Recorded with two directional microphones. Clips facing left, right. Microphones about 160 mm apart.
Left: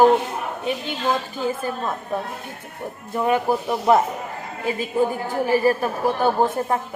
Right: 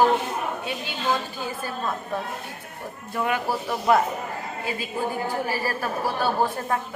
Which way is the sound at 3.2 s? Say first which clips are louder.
Left 5 dB; 20° left (ahead or behind).